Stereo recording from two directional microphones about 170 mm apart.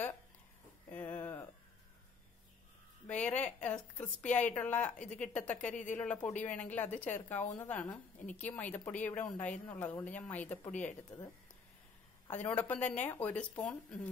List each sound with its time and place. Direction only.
0.8 s a sound: 10° left (ahead or behind)
3.1 s a woman's voice: 5° left (ahead or behind)
12.3 s a woman's voice: 10° left (ahead or behind)